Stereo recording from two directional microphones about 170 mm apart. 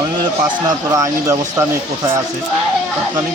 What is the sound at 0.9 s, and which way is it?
Speech, 20° right (ahead or behind).